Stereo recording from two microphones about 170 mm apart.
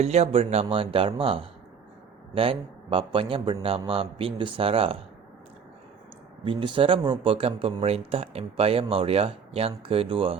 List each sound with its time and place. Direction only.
0.0 s speech: 40° right (ahead or behind)
6.4 s speech: 30° right (ahead or behind)